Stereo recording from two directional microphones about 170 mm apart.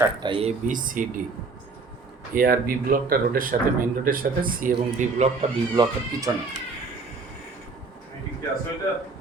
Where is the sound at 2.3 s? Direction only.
55° right (ahead or behind).